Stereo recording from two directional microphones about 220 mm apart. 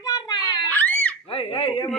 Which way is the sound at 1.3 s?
25° left (ahead or behind).